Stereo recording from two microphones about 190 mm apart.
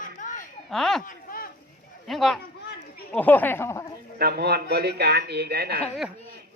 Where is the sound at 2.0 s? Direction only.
Centre (ahead or behind).